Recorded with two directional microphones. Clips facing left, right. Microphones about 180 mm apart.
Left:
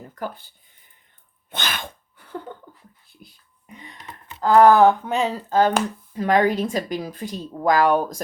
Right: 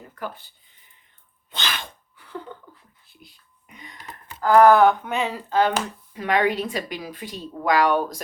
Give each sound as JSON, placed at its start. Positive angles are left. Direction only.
{"t": 1.5, "sound": "sneeze", "side_deg": 50}
{"t": 3.8, "sound": "a sound", "side_deg": 30}
{"t": 4.5, "sound": "speech", "side_deg": 30}